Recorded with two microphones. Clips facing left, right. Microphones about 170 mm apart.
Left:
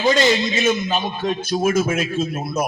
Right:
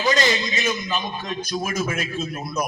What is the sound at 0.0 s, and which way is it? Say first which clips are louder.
A man's voice: left 5 dB; 30° left (ahead or behind).